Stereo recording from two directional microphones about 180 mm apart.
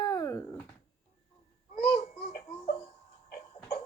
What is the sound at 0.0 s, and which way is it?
Dog, 25° left (ahead or behind).